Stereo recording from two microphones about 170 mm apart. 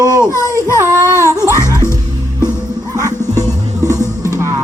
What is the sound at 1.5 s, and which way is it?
Music, 15° left (ahead or behind).